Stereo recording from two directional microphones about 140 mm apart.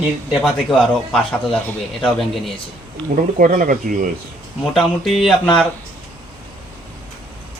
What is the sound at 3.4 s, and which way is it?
Speech, 75° right (ahead or behind).